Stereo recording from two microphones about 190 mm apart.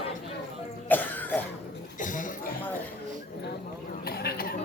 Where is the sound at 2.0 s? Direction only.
45° left (ahead or behind).